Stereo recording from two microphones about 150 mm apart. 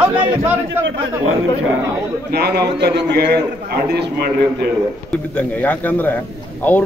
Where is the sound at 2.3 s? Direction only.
90° right.